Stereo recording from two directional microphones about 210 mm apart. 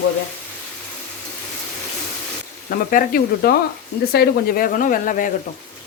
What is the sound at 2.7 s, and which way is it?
Speech, 45° left (ahead or behind).